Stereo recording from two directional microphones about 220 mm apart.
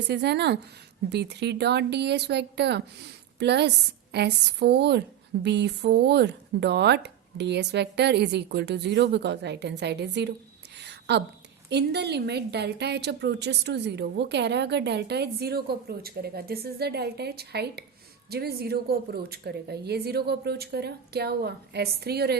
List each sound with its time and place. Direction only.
0.1 s a woman's voice: 50° right (ahead or behind)
10.8 s a sound: 50° right (ahead or behind)
11.7 s a woman's voice: 50° right (ahead or behind)